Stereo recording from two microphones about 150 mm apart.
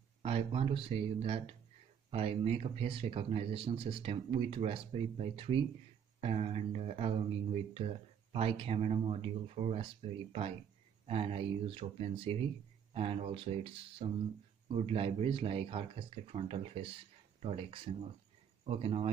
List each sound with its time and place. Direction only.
0.2 s speech: 40° right (ahead or behind)
11.1 s speech: 40° right (ahead or behind)